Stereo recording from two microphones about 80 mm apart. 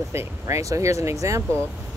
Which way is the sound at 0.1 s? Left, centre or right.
Right.